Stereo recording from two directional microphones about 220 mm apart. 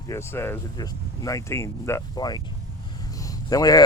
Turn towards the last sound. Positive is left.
turn(degrees=15)  # may be behind; listen again after turning